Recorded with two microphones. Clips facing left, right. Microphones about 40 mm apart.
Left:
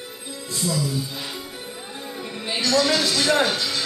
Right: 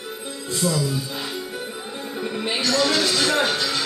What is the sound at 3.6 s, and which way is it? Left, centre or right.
Speech, right.